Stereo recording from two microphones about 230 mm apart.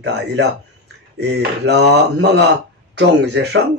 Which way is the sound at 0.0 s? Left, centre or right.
Right.